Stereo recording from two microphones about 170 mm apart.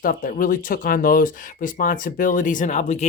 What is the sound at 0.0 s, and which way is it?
Speech, 55° left (ahead or behind).